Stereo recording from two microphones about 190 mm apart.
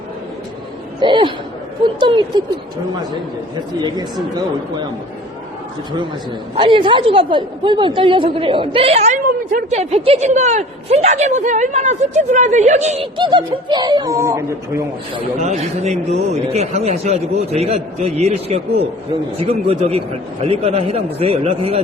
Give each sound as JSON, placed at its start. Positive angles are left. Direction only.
{"t": 0.9, "sound": "speech", "side_deg": -25}
{"t": 3.5, "sound": "speech", "side_deg": -20}
{"t": 6.6, "sound": "a woman's voice", "side_deg": -25}
{"t": 13.1, "sound": "speech", "side_deg": -25}
{"t": 15.4, "sound": "a woman's voice", "side_deg": -35}